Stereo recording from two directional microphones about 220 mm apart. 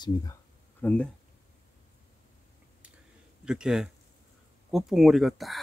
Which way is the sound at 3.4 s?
5° right (ahead or behind).